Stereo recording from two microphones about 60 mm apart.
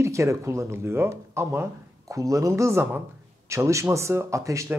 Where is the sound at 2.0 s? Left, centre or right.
Right.